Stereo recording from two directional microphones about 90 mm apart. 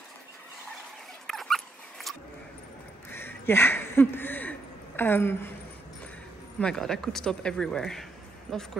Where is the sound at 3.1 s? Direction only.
25° left (ahead or behind).